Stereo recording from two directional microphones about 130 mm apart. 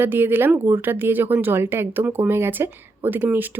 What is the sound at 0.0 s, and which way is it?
A woman's voice, 15° right (ahead or behind).